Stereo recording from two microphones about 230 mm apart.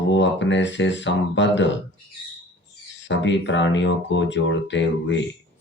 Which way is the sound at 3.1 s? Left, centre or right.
Left.